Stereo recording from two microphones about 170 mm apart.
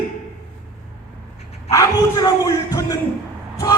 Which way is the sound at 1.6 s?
20° left (ahead or behind).